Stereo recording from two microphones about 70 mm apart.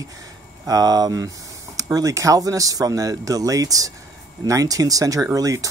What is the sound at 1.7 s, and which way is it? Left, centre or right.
Speech, right.